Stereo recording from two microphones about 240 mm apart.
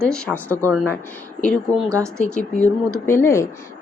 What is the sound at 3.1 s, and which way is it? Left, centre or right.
Speech, centre.